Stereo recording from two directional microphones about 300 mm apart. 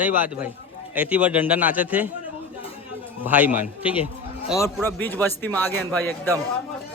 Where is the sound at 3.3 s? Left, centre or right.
Centre.